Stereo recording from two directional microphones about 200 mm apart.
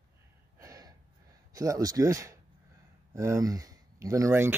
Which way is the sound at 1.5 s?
15° right (ahead or behind).